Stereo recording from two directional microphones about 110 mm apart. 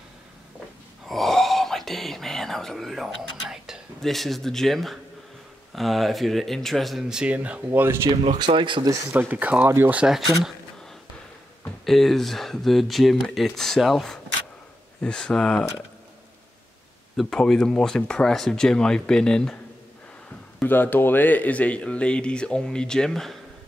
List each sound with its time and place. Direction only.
1.0 s wail: centre (ahead or behind)
5.8 s speech: centre (ahead or behind); by 8.1 s 20° right (ahead or behind)
8.5 s speech: 50° right (ahead or behind)
9.1 s speech: 15° right (ahead or behind)
11.8 s speech: centre (ahead or behind)
17.2 s speech: 5° left (ahead or behind)
20.6 s speech: 15° left (ahead or behind)